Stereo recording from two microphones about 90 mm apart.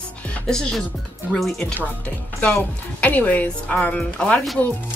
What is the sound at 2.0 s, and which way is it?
Speech, 15° left (ahead or behind).